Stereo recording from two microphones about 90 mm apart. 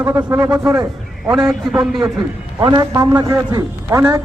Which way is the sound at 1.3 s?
5° right (ahead or behind).